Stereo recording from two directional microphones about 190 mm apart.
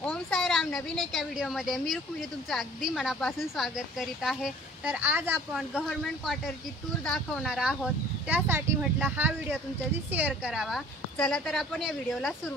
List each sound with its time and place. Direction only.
0.0 s a woman's voice: 5° left (ahead or behind)